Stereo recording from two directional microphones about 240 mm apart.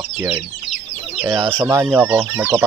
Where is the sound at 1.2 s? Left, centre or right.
Centre.